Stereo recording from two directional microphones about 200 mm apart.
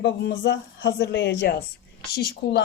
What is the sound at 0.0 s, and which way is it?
Speech, 60° left (ahead or behind).